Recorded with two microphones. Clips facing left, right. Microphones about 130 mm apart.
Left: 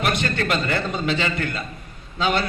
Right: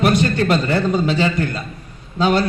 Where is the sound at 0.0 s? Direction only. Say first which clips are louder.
Right 7 dB; 35° right (ahead or behind).